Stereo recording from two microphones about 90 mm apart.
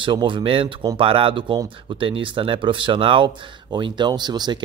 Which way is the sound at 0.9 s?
90° right.